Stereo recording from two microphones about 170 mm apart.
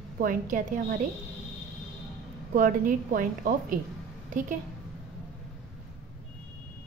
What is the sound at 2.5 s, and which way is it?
A woman's voice, 55° right (ahead or behind).